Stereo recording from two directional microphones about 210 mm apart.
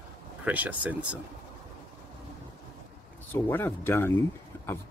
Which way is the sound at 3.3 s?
10° left (ahead or behind).